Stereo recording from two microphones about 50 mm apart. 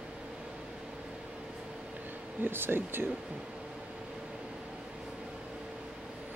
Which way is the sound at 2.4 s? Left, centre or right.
Right.